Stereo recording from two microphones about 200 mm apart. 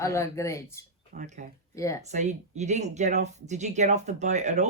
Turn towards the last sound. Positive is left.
turn(degrees=-35)  # may be behind; listen again after turning